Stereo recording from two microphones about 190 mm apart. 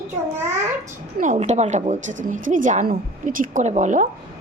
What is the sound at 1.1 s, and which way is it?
A woman's voice, 40° right (ahead or behind).